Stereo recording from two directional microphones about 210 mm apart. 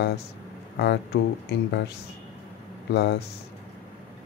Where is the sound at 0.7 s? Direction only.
50° left (ahead or behind).